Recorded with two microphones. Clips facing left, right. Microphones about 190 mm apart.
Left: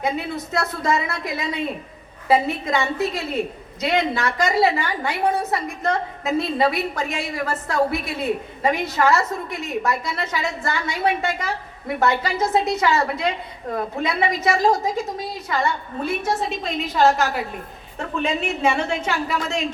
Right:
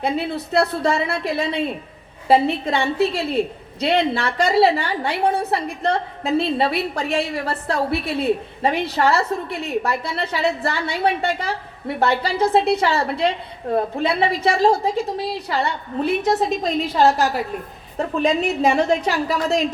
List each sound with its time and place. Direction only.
0.0 s a woman's voice: 35° right (ahead or behind)